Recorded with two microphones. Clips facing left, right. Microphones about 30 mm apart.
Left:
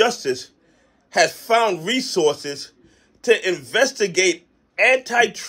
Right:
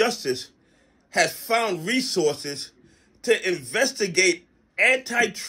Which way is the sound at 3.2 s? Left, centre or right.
Left.